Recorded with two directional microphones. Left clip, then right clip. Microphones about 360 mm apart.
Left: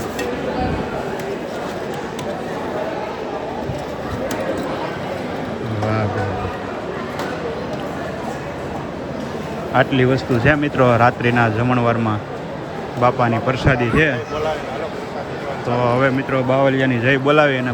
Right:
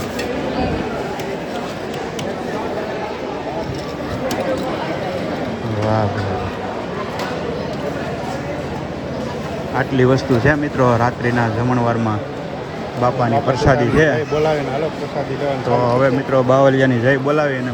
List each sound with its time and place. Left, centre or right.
9.7 s speech: centre
13.0 s speech: centre
15.9 s speech: centre
16.5 s speech: left
17.1 s speech: centre